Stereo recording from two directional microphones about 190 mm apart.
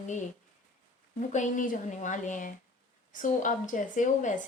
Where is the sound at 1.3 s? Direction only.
40° left (ahead or behind).